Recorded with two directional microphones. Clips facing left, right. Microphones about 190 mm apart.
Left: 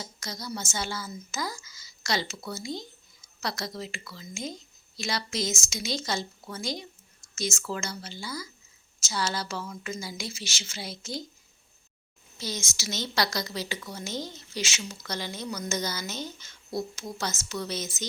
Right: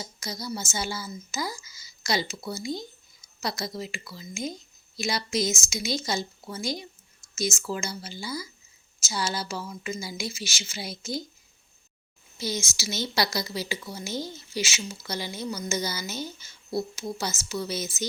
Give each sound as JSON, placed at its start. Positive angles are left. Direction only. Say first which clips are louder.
{"t": 0.0, "sound": "a woman's voice", "louder": "right 3 dB", "side_deg": -10}
{"t": 12.4, "sound": "a woman's voice", "louder": "right 4 dB", "side_deg": -10}